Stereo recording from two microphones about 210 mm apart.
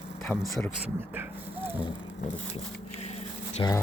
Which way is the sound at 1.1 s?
10° right (ahead or behind).